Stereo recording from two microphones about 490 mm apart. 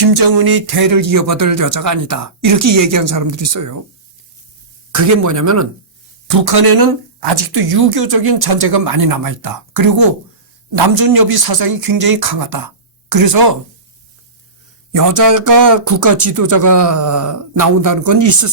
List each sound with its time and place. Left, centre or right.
0.0 s speech: right
4.9 s speech: right
6.2 s a woman's voice: right
14.9 s speech: right